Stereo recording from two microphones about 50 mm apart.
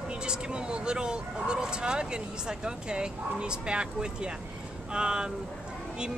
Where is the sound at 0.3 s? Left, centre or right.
Centre.